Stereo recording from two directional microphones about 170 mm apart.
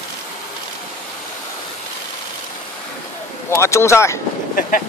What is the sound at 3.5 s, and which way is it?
Speech, 15° left (ahead or behind).